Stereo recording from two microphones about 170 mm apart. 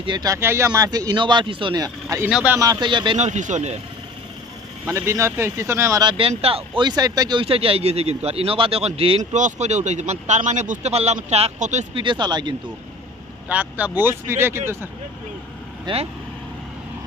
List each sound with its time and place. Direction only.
0.0 s speech: 25° right (ahead or behind)
2.2 s speech: 10° right (ahead or behind)
2.6 s speech: 25° right (ahead or behind)
3.2 s speech: 45° right (ahead or behind)
4.8 s speech: 15° right (ahead or behind); by 12.0 s 40° right (ahead or behind)
12.0 s speech: 25° right (ahead or behind)
13.5 s speech: 10° right (ahead or behind)
15.8 s speech: 35° right (ahead or behind)